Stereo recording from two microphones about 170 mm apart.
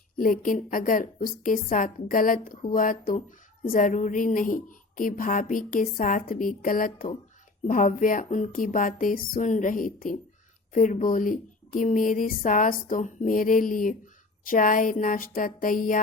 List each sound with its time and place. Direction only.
0.2 s a woman's voice: 55° left (ahead or behind)